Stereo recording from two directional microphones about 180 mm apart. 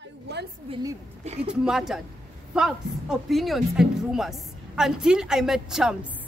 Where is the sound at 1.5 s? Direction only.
5° right (ahead or behind).